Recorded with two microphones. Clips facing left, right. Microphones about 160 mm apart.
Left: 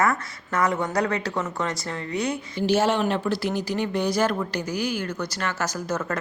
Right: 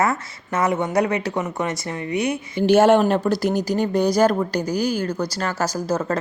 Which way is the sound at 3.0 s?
45° right (ahead or behind).